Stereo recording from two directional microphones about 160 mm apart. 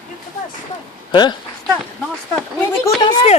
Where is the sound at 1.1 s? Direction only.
25° left (ahead or behind).